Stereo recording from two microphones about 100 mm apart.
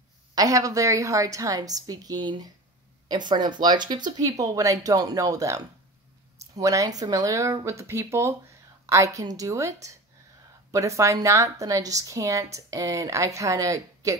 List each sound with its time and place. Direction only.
0.3 s a woman's voice: 35° right (ahead or behind)